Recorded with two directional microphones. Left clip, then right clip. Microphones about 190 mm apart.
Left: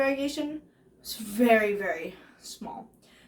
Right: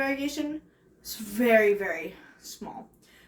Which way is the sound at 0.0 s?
15° left (ahead or behind).